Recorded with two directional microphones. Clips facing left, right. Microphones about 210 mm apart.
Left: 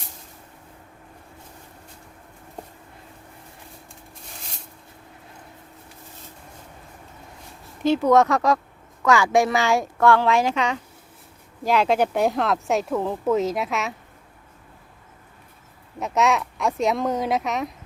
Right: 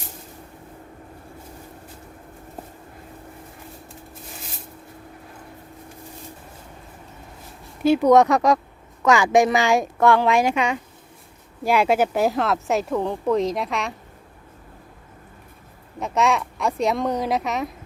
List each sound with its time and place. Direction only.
7.8 s speech: 10° right (ahead or behind)
16.0 s speech: centre (ahead or behind)